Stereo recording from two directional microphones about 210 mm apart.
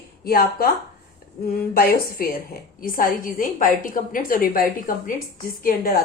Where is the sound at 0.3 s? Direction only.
45° left (ahead or behind).